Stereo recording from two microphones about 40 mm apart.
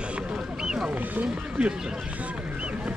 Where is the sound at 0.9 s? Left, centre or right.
Right.